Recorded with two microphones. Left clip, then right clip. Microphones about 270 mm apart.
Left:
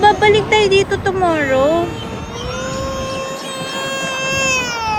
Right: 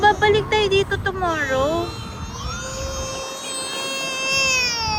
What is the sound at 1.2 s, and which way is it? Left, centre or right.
Speech, left.